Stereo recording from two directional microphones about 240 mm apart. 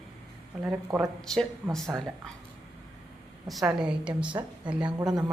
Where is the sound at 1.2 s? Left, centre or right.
Centre.